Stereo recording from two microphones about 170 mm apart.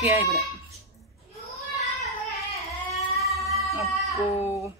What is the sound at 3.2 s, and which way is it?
Music, centre (ahead or behind).